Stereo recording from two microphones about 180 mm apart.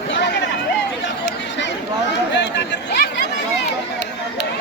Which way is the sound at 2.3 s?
75° left (ahead or behind).